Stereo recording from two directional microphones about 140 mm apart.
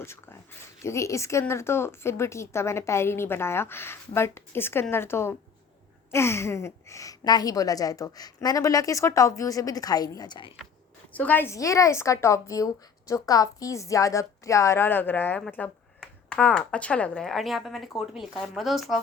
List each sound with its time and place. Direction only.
0.0 s a woman's voice: 20° left (ahead or behind)
11.1 s a woman's voice: 10° left (ahead or behind)